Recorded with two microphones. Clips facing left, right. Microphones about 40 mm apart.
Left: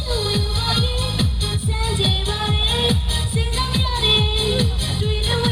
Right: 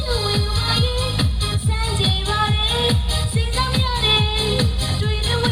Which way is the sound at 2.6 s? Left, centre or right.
Centre.